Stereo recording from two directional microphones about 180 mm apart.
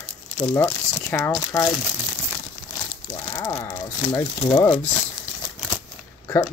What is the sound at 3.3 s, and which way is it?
Speech, 20° left (ahead or behind).